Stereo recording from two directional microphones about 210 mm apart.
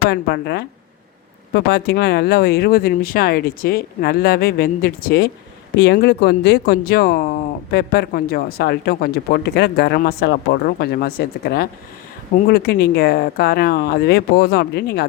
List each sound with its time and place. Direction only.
0.1 s speech: 50° left (ahead or behind)